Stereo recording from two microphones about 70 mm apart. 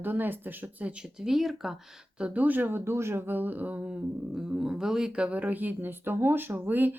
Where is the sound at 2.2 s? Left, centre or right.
Right.